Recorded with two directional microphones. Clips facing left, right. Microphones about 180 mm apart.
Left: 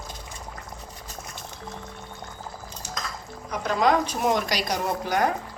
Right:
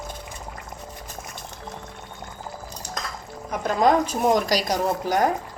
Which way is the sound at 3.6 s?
45° right (ahead or behind).